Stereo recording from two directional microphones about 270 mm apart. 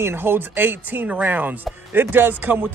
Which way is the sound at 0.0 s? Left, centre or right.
Centre.